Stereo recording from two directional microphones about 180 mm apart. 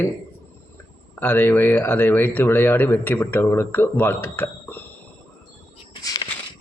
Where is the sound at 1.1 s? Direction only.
10° left (ahead or behind).